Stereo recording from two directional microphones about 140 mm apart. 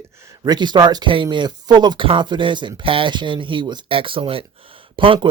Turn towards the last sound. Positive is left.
turn(degrees=-35)  # may be behind; listen again after turning